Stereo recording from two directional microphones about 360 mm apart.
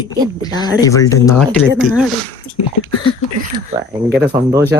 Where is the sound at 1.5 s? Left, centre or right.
Centre.